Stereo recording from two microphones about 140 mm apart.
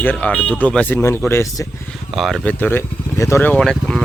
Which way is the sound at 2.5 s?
10° left (ahead or behind).